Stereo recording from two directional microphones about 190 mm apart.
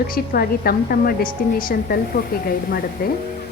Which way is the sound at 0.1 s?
50° left (ahead or behind).